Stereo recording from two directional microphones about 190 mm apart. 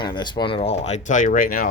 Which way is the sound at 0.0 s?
25° left (ahead or behind).